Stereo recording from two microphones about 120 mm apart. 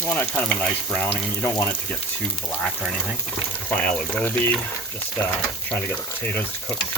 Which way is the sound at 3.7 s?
15° left (ahead or behind).